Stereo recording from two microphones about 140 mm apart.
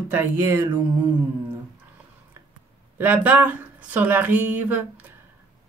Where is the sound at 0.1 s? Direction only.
15° right (ahead or behind).